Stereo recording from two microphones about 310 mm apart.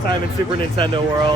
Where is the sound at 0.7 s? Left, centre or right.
Centre.